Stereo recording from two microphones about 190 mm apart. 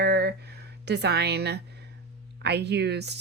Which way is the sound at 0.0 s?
55° right (ahead or behind).